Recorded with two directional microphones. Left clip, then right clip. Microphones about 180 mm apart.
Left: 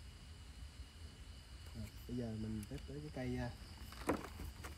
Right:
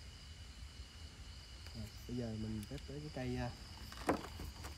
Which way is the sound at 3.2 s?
25° right (ahead or behind).